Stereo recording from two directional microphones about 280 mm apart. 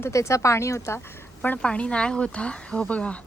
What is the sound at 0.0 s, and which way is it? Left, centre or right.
A woman's voice, centre.